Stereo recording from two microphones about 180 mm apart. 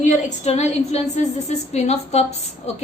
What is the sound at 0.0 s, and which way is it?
A woman's voice, 45° left (ahead or behind).